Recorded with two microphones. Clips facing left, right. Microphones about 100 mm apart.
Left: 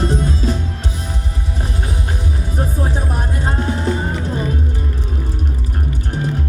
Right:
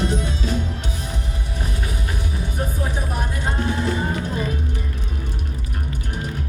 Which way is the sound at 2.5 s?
35° left (ahead or behind).